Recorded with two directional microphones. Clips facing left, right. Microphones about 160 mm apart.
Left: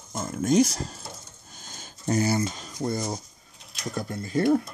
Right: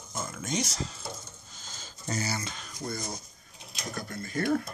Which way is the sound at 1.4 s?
55° left (ahead or behind).